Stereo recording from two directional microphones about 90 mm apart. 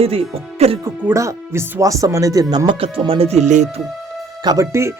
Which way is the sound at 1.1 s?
35° right (ahead or behind).